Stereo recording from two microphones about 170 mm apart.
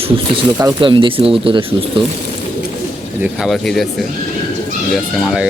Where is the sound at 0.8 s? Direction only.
30° right (ahead or behind).